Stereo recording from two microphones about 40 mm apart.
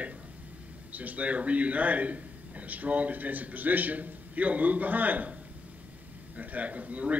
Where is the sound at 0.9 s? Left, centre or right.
Right.